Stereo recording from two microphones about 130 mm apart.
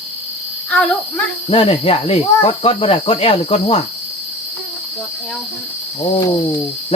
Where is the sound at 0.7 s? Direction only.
5° left (ahead or behind).